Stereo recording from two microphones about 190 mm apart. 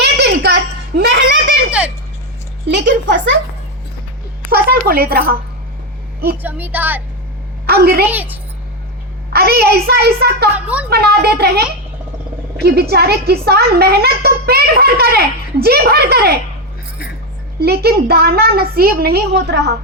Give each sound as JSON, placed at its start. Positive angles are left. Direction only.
{"t": 0.0, "sound": "a sound", "side_deg": -60}
{"t": 2.6, "sound": "a sound", "side_deg": -70}
{"t": 4.4, "sound": "a sound", "side_deg": -55}
{"t": 6.4, "sound": "a woman's voice", "side_deg": -10}
{"t": 7.7, "sound": "a woman's voice", "side_deg": -55}
{"t": 8.1, "sound": "a woman's voice", "side_deg": -10}
{"t": 9.3, "sound": "speech", "side_deg": -55}
{"t": 12.6, "sound": "speech", "side_deg": -55}
{"t": 17.6, "sound": "speech", "side_deg": -55}